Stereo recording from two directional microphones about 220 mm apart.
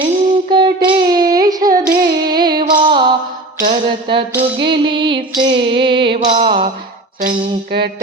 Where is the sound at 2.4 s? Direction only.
20° right (ahead or behind).